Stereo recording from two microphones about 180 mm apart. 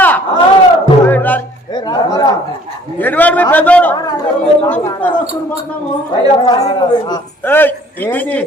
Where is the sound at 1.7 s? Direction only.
25° left (ahead or behind).